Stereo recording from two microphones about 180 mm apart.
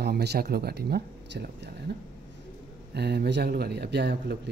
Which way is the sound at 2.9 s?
65° right (ahead or behind).